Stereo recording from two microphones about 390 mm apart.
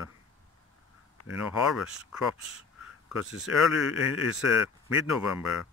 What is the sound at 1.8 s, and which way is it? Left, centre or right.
Speech, centre.